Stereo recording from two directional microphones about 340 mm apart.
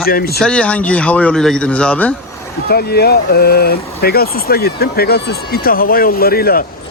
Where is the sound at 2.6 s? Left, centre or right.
Left.